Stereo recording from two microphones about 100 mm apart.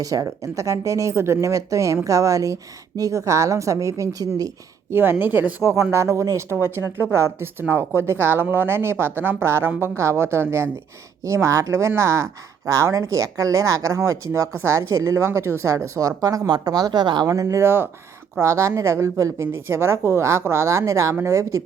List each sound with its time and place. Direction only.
0.0 s speech: 35° right (ahead or behind)
4.9 s speech: 20° right (ahead or behind)